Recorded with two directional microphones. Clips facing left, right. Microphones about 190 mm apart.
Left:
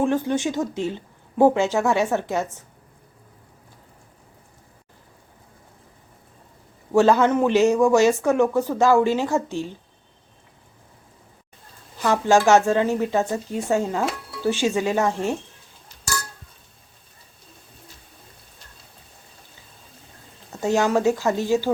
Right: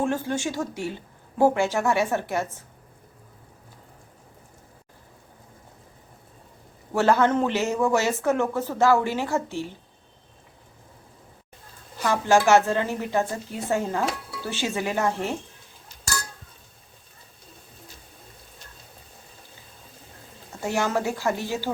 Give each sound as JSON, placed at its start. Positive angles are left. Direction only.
{"t": 0.0, "sound": "speech", "side_deg": 20}
{"t": 6.9, "sound": "speech", "side_deg": 15}
{"t": 12.2, "sound": "speech", "side_deg": 15}
{"t": 20.6, "sound": "speech", "side_deg": 15}